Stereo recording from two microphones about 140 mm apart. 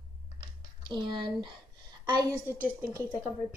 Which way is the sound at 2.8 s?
20° right (ahead or behind).